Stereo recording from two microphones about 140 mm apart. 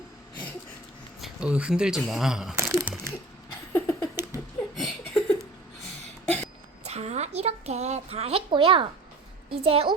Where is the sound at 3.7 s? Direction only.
15° left (ahead or behind).